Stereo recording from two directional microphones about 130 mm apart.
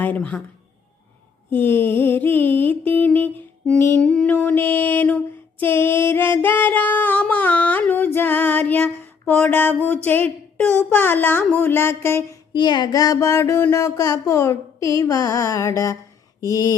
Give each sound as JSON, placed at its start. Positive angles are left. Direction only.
{"t": 0.0, "sound": "speech", "side_deg": 10}
{"t": 1.5, "sound": "music", "side_deg": 15}
{"t": 4.4, "sound": "a sound", "side_deg": 15}
{"t": 9.8, "sound": "speech", "side_deg": 15}
{"t": 11.5, "sound": "music", "side_deg": 15}
{"t": 12.5, "sound": "mantra", "side_deg": 35}